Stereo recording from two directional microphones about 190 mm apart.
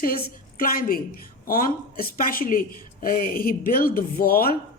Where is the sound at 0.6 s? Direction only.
50° left (ahead or behind).